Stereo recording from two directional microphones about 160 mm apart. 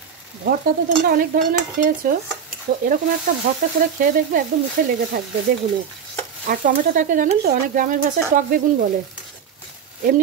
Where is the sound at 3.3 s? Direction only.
55° right (ahead or behind).